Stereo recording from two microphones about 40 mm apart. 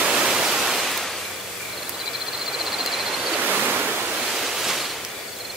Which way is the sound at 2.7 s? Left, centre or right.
Centre.